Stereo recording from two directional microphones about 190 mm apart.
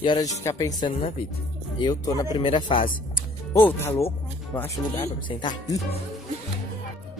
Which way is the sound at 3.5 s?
15° left (ahead or behind).